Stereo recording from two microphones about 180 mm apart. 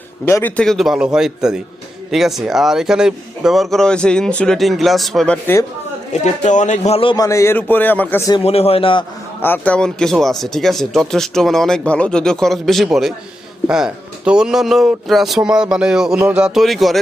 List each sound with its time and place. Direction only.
0.3 s speech: 10° left (ahead or behind)
6.2 s speech: 40° left (ahead or behind)
7.3 s a man's voice: 15° left (ahead or behind)
8.4 s speech: 35° left (ahead or behind)
9.4 s speech: 10° left (ahead or behind)